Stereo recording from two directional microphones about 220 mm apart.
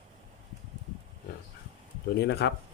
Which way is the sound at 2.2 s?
50° left (ahead or behind).